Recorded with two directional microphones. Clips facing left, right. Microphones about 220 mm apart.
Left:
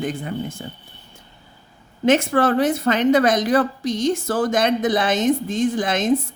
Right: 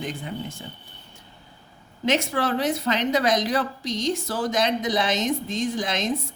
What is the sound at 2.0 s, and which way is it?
A woman's voice, 50° left (ahead or behind).